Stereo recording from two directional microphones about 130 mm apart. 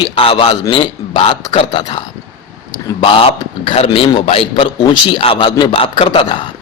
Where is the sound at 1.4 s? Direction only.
30° left (ahead or behind).